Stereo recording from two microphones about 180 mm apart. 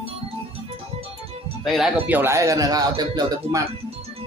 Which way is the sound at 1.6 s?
Centre (ahead or behind).